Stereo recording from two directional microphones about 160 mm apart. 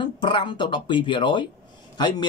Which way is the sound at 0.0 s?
30° left (ahead or behind).